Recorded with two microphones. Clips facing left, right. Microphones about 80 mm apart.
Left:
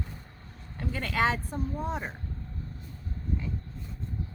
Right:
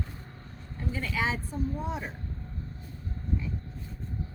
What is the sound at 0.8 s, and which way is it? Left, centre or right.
Speech, left.